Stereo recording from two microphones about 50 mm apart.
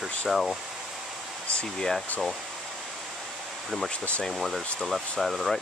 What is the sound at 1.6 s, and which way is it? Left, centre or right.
Speech, centre.